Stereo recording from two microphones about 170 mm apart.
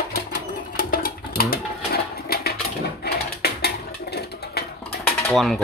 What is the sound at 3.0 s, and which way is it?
Mechanisms, 65° left (ahead or behind).